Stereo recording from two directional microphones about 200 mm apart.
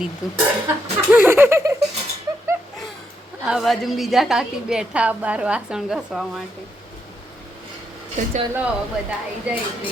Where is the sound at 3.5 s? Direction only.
Centre (ahead or behind).